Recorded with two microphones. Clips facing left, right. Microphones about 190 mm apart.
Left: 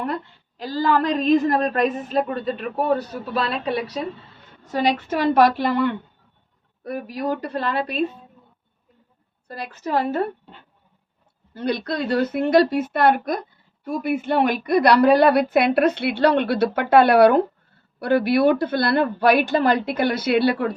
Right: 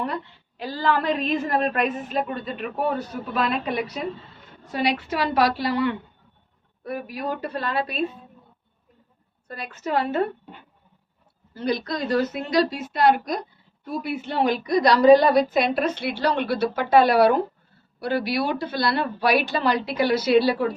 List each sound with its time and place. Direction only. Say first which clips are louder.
0.1 s a woman's voice: left 3 dB; 40° left (ahead or behind)
4.7 s a woman's voice: left 3 dB; 45° left (ahead or behind)
9.5 s a woman's voice: left 2 dB; 35° left (ahead or behind)
11.5 s a woman's voice: left 2 dB; 60° left (ahead or behind)